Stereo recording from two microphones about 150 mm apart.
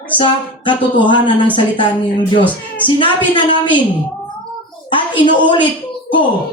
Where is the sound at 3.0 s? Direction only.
30° left (ahead or behind).